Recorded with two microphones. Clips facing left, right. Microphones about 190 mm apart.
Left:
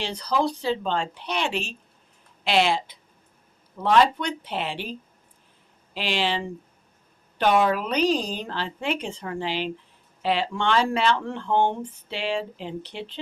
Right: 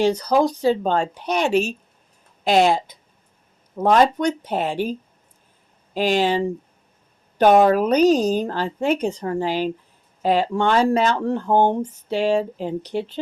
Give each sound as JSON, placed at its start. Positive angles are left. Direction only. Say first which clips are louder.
{"t": 0.0, "sound": "speech", "louder": "right 8 dB", "side_deg": -45}